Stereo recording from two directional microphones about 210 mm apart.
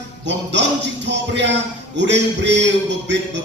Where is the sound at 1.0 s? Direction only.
55° right (ahead or behind).